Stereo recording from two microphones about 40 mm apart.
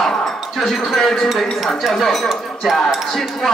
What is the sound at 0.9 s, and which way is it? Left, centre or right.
Speech, centre.